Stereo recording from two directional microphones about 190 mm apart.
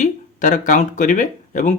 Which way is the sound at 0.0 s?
40° left (ahead or behind).